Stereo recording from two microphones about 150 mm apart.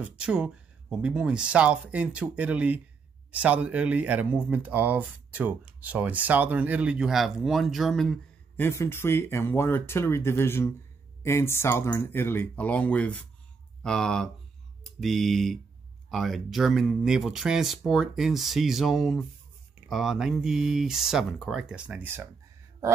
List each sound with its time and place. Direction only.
0.0 s speech: 5° right (ahead or behind)
8.5 s speech: 15° left (ahead or behind); by 22.3 s 15° right (ahead or behind)